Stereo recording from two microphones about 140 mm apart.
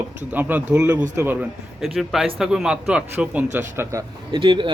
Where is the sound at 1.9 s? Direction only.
Centre (ahead or behind); by 4.0 s 20° right (ahead or behind).